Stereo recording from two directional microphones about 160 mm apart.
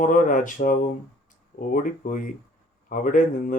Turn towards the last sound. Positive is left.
turn(degrees=55)  # may be behind; listen again after turning